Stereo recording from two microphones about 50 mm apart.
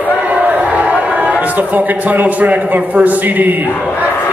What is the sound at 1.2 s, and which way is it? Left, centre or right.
A man's voice, right.